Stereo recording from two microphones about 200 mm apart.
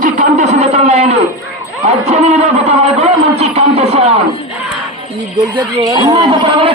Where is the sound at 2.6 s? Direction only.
30° right (ahead or behind).